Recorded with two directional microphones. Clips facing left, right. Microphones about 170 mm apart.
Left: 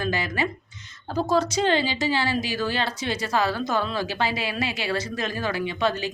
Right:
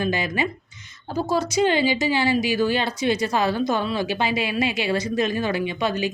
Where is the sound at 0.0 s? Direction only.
15° right (ahead or behind).